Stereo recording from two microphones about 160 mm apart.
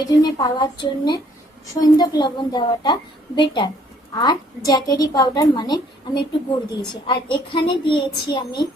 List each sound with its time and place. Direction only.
0.2 s a woman's voice: 25° left (ahead or behind)